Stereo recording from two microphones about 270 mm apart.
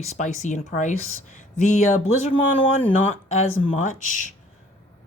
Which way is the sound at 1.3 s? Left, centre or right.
Left.